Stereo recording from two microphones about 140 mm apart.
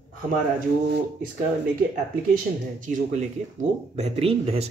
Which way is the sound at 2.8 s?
65° right (ahead or behind).